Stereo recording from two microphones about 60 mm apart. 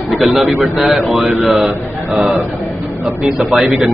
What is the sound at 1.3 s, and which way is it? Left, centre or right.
Mantra, right.